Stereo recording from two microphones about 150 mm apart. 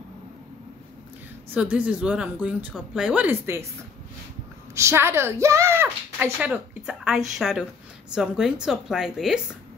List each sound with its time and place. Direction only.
1.5 s speech: 10° right (ahead or behind)
4.7 s a woman's voice: 15° right (ahead or behind)